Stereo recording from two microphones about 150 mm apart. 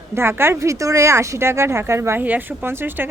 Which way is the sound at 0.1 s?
15° right (ahead or behind).